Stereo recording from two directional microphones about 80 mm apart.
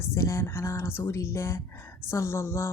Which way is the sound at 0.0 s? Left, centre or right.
Left.